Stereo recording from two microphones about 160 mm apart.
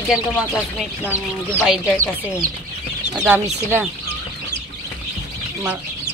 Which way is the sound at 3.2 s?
10° right (ahead or behind).